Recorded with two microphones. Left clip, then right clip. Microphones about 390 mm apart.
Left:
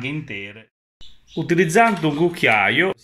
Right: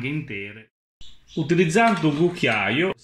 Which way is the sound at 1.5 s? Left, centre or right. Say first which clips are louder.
Left 3 dB; centre.